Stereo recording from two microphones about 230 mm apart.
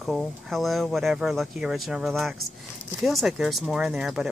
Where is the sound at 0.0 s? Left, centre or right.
Centre.